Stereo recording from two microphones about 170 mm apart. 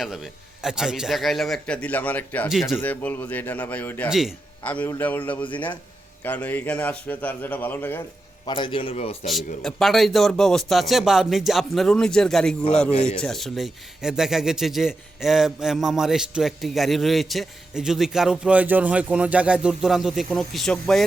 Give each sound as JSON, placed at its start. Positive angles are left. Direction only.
{"t": 0.0, "sound": "a man's voice", "side_deg": 0}
{"t": 2.5, "sound": "a man's voice", "side_deg": 0}
{"t": 2.8, "sound": "a man's voice", "side_deg": 10}
{"t": 4.1, "sound": "a man's voice", "side_deg": 0}
{"t": 4.6, "sound": "a man's voice", "side_deg": 10}
{"t": 8.4, "sound": "a man's voice", "side_deg": 25}
{"t": 9.2, "sound": "a man's voice", "side_deg": 0}